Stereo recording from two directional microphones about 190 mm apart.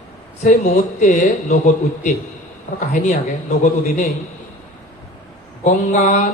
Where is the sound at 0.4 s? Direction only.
45° left (ahead or behind).